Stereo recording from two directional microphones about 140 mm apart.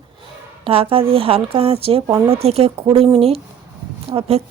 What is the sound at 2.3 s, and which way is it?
Speech, 45° right (ahead or behind).